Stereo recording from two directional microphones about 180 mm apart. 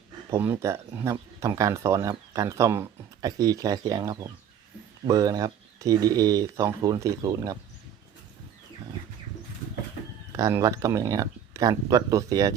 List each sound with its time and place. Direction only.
0.3 s speech: 10° right (ahead or behind)
10.3 s speech: 20° right (ahead or behind)